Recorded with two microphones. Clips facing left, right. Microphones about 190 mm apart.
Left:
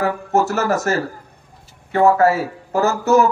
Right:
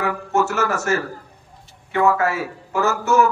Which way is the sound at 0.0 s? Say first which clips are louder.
Left 3 dB; 35° left (ahead or behind).